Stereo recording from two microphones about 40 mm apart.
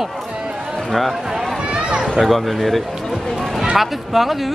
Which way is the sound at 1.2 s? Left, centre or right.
Centre.